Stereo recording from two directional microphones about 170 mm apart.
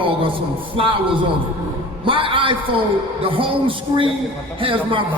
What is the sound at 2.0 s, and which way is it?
Speech, 30° right (ahead or behind).